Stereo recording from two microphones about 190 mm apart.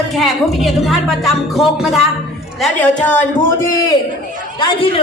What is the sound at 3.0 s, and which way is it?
Speech, 10° left (ahead or behind).